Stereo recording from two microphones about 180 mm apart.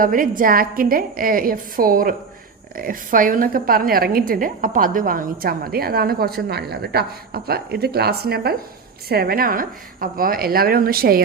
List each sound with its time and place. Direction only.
0.0 s a woman's voice: 50° right (ahead or behind)